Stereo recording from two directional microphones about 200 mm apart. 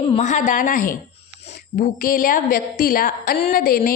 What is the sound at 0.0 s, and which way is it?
A woman's voice, 35° left (ahead or behind).